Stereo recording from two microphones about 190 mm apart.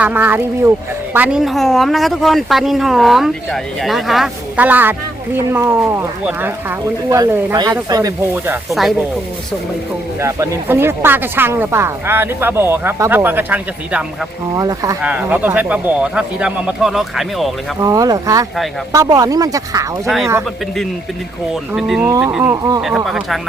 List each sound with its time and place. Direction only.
0.0 s speech: 10° right (ahead or behind)
10.2 s speech: 15° right (ahead or behind)
17.7 s speech: 20° right (ahead or behind)
21.5 s speech: 5° right (ahead or behind); by 22.8 s 20° right (ahead or behind)
22.8 s speech: 5° right (ahead or behind)